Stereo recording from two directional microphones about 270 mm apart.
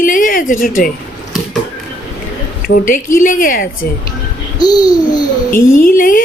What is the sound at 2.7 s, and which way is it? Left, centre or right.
Speech, left.